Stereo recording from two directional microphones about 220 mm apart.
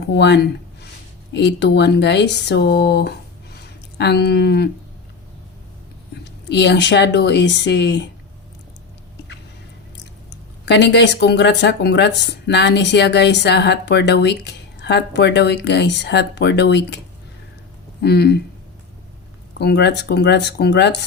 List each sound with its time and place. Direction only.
0.1 s speech: 50° left (ahead or behind)
3.5 s a sound: 50° left (ahead or behind)
6.2 s speech: 50° left (ahead or behind)
10.7 s speech: 50° left (ahead or behind)
18.0 s speech: 45° left (ahead or behind)
19.5 s speech: 50° left (ahead or behind)